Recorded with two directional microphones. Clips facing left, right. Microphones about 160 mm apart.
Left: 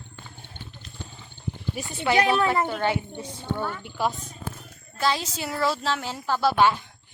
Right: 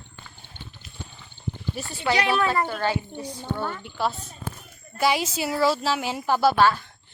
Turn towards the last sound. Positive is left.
turn(degrees=20)  # may be behind; listen again after turning